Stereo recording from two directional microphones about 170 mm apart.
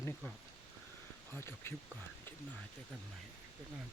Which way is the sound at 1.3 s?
15° left (ahead or behind).